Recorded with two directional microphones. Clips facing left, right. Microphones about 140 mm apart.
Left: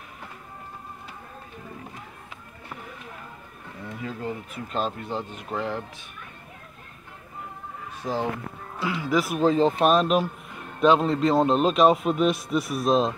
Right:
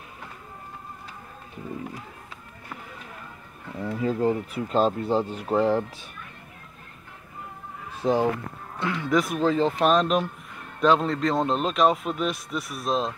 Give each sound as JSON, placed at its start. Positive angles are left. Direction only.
{"t": 3.8, "sound": "speech", "side_deg": -35}
{"t": 8.0, "sound": "speech", "side_deg": -25}
{"t": 8.7, "sound": "a man's voice", "side_deg": 5}
{"t": 9.4, "sound": "a man's voice", "side_deg": 20}